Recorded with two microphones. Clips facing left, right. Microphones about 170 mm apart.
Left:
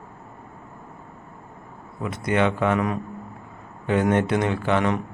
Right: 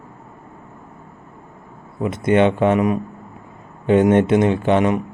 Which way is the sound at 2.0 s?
25° right (ahead or behind).